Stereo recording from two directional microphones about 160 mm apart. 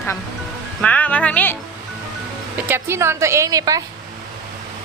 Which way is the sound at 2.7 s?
15° right (ahead or behind).